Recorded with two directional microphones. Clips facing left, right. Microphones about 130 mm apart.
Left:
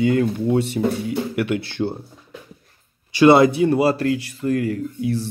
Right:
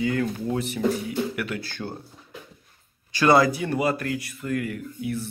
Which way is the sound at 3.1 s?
25° left (ahead or behind).